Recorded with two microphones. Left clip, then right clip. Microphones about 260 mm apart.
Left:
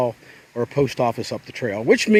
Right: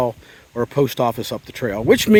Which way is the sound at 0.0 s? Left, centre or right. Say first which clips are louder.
Right 1 dB; centre.